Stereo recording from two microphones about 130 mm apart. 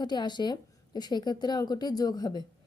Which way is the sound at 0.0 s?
35° left (ahead or behind).